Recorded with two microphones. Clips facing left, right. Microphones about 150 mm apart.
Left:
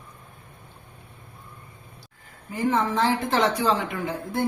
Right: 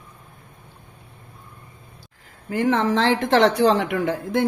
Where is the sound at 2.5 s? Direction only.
90° right.